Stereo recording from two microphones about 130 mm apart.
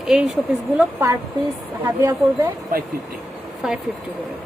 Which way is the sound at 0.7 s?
20° right (ahead or behind).